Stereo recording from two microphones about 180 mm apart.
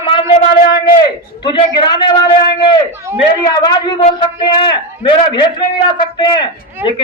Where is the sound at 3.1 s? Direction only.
15° right (ahead or behind).